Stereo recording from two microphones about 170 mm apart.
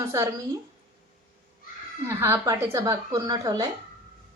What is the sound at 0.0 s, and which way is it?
Speech, 15° right (ahead or behind).